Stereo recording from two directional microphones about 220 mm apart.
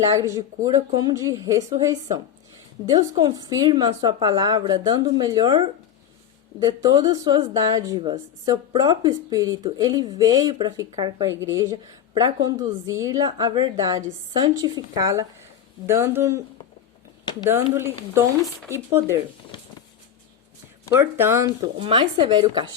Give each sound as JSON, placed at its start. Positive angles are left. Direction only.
{"t": 0.2, "sound": "speech", "side_deg": -15}
{"t": 17.4, "sound": "speech", "side_deg": -10}
{"t": 21.2, "sound": "speech", "side_deg": -10}